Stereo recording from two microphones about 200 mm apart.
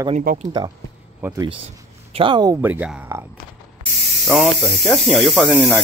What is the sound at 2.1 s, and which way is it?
Speech, 25° right (ahead or behind).